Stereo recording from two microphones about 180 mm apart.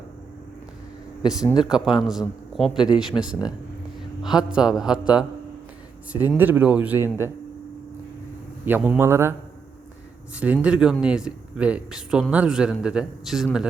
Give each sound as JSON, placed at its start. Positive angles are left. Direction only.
{"t": 1.2, "sound": "speech", "side_deg": 20}
{"t": 1.6, "sound": "a man's voice", "side_deg": -5}
{"t": 6.1, "sound": "speech", "side_deg": -10}
{"t": 8.6, "sound": "speech", "side_deg": -10}
{"t": 10.3, "sound": "a man's voice", "side_deg": -5}